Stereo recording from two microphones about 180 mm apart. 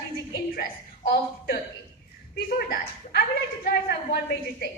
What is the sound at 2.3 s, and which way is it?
A woman's voice, 60° left (ahead or behind).